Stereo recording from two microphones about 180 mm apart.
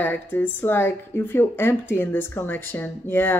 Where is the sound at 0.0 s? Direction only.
10° left (ahead or behind).